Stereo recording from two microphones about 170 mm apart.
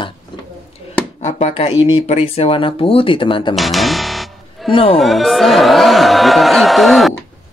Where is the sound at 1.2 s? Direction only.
40° left (ahead or behind).